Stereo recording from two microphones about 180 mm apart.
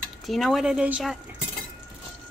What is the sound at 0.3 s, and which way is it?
Speech, centre (ahead or behind).